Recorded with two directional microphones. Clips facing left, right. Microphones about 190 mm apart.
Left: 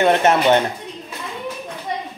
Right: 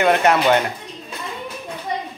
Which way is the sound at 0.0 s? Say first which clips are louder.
Left 1 dB; 25° left (ahead or behind).